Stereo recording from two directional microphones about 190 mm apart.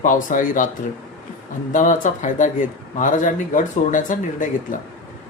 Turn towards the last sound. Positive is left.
turn(degrees=45)  # may be behind; listen again after turning